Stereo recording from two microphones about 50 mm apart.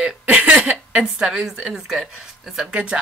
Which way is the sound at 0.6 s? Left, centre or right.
Right.